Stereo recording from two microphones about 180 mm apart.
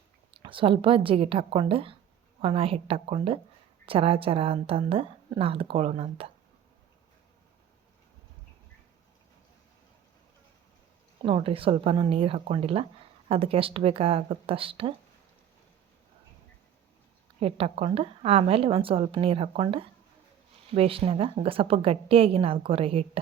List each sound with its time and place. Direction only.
0.3 s a woman's voice: 30° right (ahead or behind)
11.2 s a woman's voice: 30° right (ahead or behind)
17.4 s a woman's voice: 35° right (ahead or behind)